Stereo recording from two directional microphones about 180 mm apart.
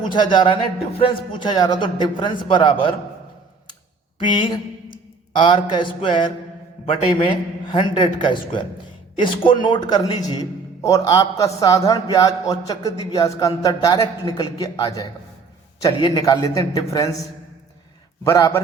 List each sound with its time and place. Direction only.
0.0 s a man's voice: 25° left (ahead or behind)
4.2 s a sound: 25° left (ahead or behind)
6.8 s a man's voice: 30° left (ahead or behind)